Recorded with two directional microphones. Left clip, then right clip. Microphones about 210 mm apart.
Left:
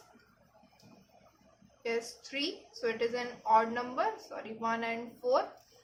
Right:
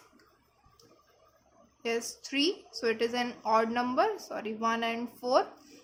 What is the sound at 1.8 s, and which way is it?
A woman's voice, 50° right (ahead or behind).